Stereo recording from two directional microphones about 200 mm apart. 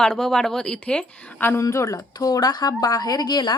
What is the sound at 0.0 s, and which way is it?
A woman's voice, 5° left (ahead or behind).